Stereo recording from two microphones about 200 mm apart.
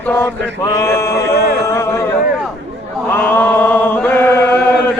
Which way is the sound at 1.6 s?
15° left (ahead or behind).